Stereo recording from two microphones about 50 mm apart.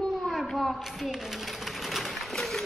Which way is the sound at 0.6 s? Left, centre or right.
Centre.